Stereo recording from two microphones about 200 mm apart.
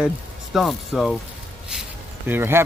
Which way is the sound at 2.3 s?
10° right (ahead or behind).